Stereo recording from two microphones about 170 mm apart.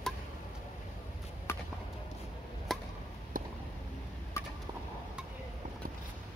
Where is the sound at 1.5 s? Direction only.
15° left (ahead or behind).